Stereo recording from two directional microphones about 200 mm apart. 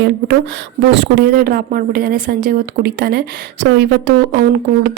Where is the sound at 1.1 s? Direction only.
50° right (ahead or behind).